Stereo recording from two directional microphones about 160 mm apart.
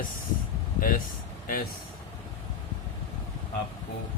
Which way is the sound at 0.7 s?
60° left (ahead or behind).